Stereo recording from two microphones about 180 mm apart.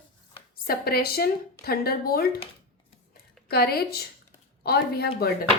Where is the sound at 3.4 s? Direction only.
60° left (ahead or behind).